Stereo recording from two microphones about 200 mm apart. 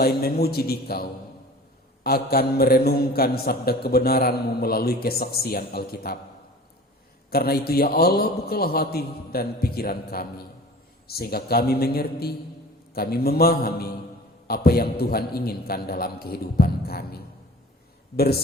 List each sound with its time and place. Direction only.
0.0 s a man's voice: 50° left (ahead or behind)
7.3 s a man's voice: 50° left (ahead or behind)